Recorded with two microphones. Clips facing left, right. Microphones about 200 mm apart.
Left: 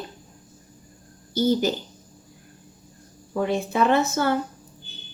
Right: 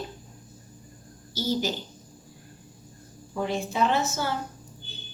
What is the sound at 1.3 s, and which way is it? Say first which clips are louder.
Speech: left 7 dB; 55° left (ahead or behind).